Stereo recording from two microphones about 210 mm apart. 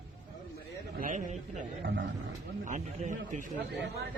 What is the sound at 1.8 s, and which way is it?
Roaring cats, 60° right (ahead or behind).